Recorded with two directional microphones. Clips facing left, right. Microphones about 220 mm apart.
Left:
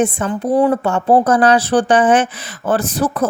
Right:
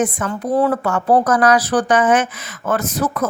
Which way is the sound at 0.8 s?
25° left (ahead or behind).